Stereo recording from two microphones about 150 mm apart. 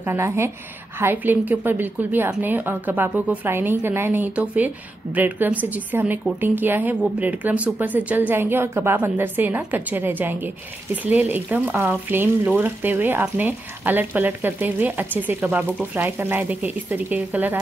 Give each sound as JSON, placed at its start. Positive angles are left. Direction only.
{"t": 0.0, "sound": "speech", "side_deg": -15}